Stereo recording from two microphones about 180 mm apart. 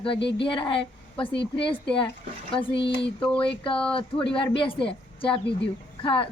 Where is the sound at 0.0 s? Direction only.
30° left (ahead or behind).